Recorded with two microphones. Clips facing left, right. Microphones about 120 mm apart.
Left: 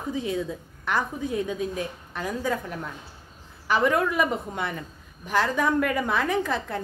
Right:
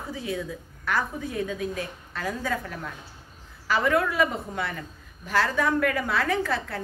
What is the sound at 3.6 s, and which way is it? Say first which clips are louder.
A woman's voice: left 1 dB; 20° left (ahead or behind).